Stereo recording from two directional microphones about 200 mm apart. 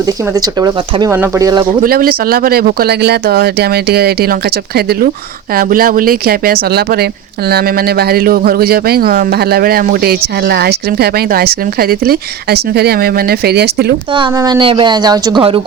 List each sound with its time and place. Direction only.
0.0 s speech: 20° right (ahead or behind)
1.8 s speech: 45° right (ahead or behind)
14.1 s speech: 20° right (ahead or behind)